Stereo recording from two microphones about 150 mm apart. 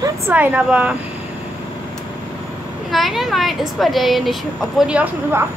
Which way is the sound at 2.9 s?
Centre (ahead or behind).